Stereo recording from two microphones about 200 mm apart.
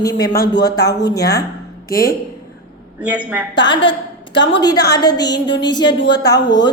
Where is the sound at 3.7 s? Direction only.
25° left (ahead or behind).